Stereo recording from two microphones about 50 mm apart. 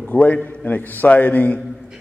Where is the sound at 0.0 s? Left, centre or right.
Left.